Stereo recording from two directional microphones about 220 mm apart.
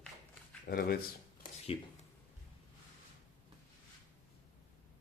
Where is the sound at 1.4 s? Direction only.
30° left (ahead or behind).